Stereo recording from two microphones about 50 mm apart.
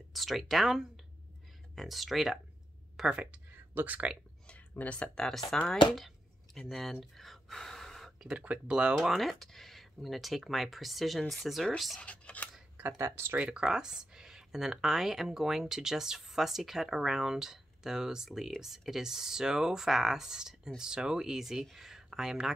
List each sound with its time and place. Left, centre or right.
0.1 s speech: centre
3.1 s speech: right
4.5 s a sound: left
5.1 s speech: centre
5.7 s a sound: centre
6.7 s gasp: centre
8.2 s speech: right
9.0 s speech: centre
12.0 s speech: left
12.9 s speech: right
13.4 s speech: centre